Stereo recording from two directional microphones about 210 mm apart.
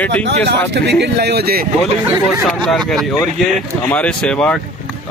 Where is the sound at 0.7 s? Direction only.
55° right (ahead or behind).